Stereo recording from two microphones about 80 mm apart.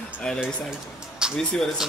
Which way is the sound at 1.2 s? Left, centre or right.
Centre.